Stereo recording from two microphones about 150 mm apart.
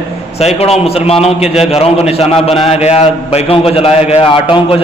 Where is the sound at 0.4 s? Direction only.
45° left (ahead or behind).